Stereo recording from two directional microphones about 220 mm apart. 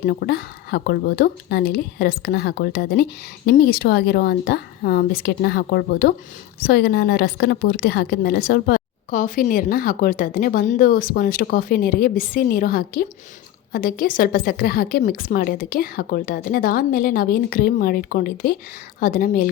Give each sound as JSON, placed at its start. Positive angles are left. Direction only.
{"t": 0.0, "sound": "a woman's voice", "side_deg": 45}